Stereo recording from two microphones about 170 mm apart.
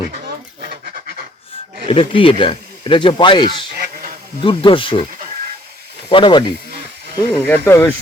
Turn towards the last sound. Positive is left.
turn(degrees=15)  # may be behind; listen again after turning